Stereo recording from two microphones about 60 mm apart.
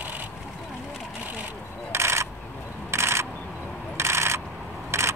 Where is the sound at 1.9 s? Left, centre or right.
Right.